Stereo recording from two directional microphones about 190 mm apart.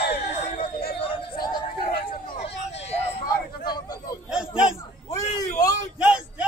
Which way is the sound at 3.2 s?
20° left (ahead or behind).